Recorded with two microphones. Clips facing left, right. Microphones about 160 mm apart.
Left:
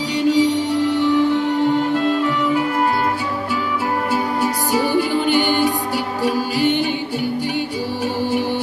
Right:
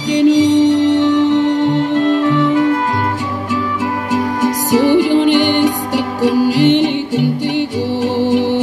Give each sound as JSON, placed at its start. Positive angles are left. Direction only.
{"t": 0.1, "sound": "music", "side_deg": -80}
{"t": 4.1, "sound": "music", "side_deg": -85}